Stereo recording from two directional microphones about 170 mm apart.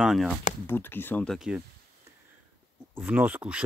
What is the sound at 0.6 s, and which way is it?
Speech, 15° left (ahead or behind).